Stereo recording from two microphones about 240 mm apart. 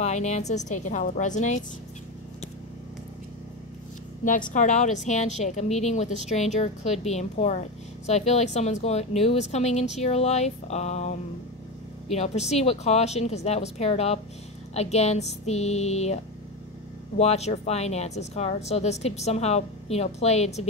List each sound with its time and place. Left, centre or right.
0.0 s a woman's voice: left
4.2 s a woman's voice: left
17.2 s a woman's voice: left